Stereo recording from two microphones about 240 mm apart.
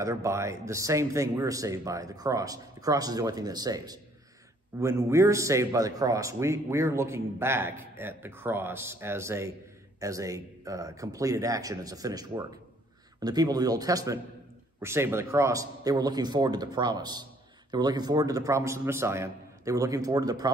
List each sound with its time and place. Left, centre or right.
0.0 s a man's voice: centre